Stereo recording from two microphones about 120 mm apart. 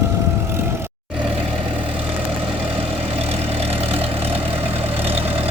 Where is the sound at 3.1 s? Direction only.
55° right (ahead or behind).